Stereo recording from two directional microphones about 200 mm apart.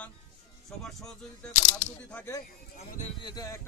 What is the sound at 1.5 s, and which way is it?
Speech, 35° left (ahead or behind).